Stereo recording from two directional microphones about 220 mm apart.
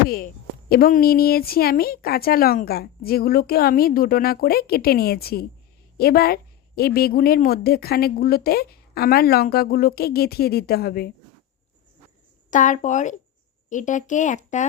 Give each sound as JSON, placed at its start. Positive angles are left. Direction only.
{"t": 0.7, "sound": "a woman's voice", "side_deg": 40}
{"t": 12.5, "sound": "speech", "side_deg": 35}